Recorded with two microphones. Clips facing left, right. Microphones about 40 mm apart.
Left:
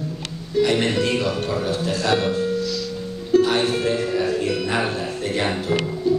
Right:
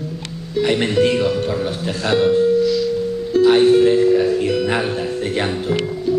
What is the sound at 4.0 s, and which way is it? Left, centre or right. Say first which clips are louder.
Speech: right 7 dB; centre.